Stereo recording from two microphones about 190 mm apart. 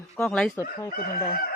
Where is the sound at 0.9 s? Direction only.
50° left (ahead or behind).